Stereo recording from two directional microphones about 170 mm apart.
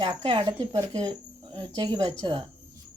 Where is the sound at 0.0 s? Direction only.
25° right (ahead or behind).